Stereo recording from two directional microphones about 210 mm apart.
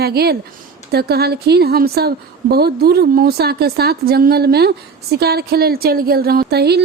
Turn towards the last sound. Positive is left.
turn(degrees=-50)  # may be behind; listen again after turning